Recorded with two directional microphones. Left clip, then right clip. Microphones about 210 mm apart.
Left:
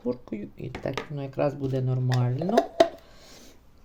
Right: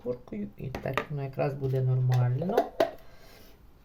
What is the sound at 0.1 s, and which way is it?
Speech, 35° left (ahead or behind).